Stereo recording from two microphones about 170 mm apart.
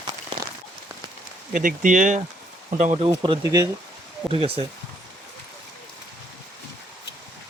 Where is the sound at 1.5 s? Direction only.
50° right (ahead or behind).